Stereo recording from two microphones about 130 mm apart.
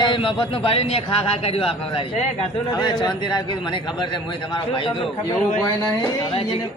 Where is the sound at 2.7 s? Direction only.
35° left (ahead or behind).